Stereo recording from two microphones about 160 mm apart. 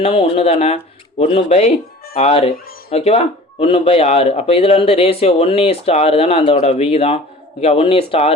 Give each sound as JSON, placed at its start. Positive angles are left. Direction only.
{"t": 0.0, "sound": "speech", "side_deg": 35}